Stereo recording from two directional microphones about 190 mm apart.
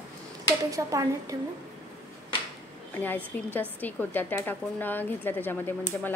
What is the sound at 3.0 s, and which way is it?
A child's voice, 10° left (ahead or behind).